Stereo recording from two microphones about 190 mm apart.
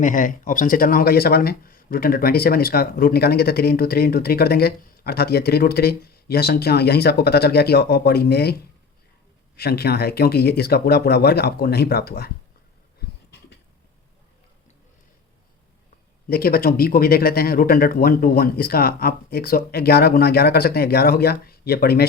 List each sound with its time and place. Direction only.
0.0 s speech: 45° left (ahead or behind)
9.6 s speech: 55° left (ahead or behind)
16.3 s speech: 50° left (ahead or behind)